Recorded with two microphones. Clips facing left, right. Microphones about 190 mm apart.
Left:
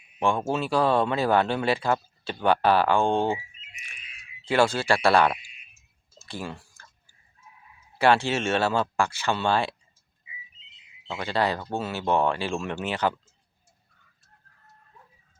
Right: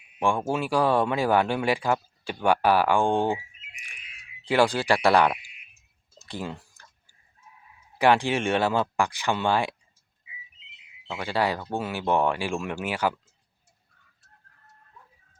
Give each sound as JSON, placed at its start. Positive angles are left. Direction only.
{"t": 0.2, "sound": "speech", "side_deg": -10}
{"t": 4.4, "sound": "speech", "side_deg": -15}
{"t": 6.1, "sound": "tick-tock", "side_deg": -20}
{"t": 7.9, "sound": "speech", "side_deg": -15}
{"t": 10.6, "sound": "a sound", "side_deg": -65}
{"t": 11.1, "sound": "speech", "side_deg": -10}